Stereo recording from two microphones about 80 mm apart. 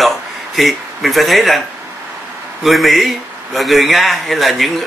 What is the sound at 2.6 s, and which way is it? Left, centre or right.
Speech, centre.